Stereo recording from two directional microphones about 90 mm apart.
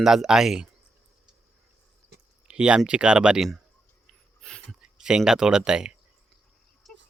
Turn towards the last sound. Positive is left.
turn(degrees=-10)  # may be behind; listen again after turning